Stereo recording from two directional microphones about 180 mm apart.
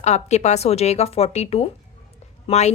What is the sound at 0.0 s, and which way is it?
A woman's voice, 40° left (ahead or behind).